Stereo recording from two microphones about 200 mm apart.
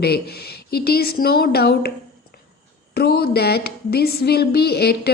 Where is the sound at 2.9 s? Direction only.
50° left (ahead or behind).